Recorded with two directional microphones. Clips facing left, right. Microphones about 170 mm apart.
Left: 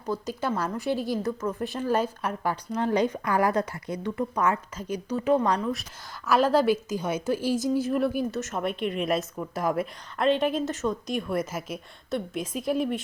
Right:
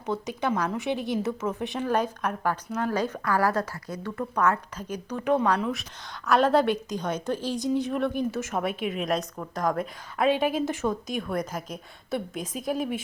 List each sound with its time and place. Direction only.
0.3 s a woman's voice: 5° left (ahead or behind)
6.2 s a woman's voice: centre (ahead or behind)
10.2 s a woman's voice: 5° right (ahead or behind)